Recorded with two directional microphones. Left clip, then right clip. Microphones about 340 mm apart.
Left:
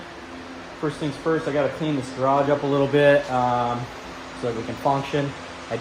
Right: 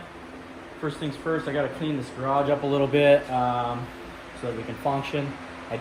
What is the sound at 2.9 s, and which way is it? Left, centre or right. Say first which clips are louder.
Speech: left 1 dB; centre.